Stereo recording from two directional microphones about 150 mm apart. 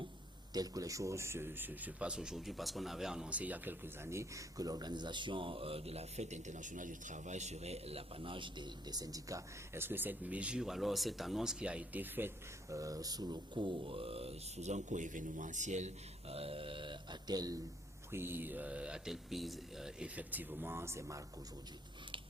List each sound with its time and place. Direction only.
0.5 s speech: 25° right (ahead or behind)
12.7 s speech: 20° right (ahead or behind); by 15.9 s 50° right (ahead or behind)
16.3 s speech: 40° right (ahead or behind)
18.1 s speech: 15° right (ahead or behind)